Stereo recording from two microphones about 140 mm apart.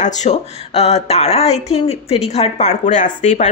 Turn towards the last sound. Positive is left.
turn(degrees=60)  # may be behind; listen again after turning